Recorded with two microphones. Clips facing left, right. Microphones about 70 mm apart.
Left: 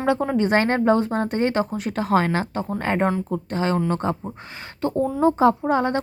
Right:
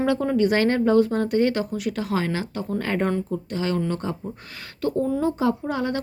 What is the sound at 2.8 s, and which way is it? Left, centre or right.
Speech, left.